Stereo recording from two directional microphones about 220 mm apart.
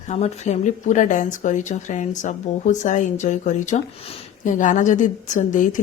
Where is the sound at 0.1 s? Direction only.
30° left (ahead or behind).